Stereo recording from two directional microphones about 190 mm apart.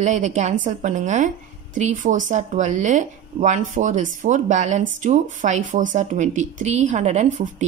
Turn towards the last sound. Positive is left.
turn(degrees=-40)  # may be behind; listen again after turning